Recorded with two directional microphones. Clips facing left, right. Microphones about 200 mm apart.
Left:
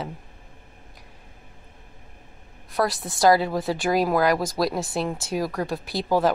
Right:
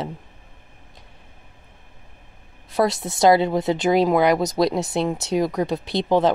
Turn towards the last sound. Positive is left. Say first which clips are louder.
# right 3 dB
turn(degrees=-20)  # may be behind; listen again after turning